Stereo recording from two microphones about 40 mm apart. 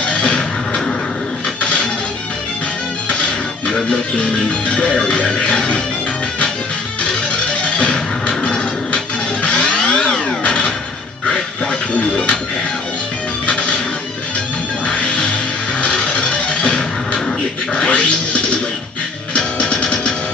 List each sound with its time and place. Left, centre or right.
0.0 s music: left
3.1 s music: left
7.0 s music: left
12.0 s speech: left
13.5 s music: left
14.9 s music: left